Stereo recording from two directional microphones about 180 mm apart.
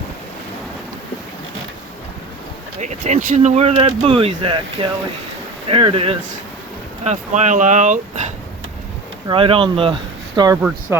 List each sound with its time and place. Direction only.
2.8 s speech: 40° right (ahead or behind)
9.2 s speech: 30° right (ahead or behind)